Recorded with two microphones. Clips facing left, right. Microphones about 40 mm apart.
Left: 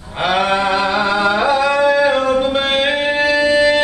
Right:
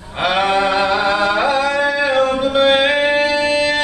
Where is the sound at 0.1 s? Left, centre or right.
Centre.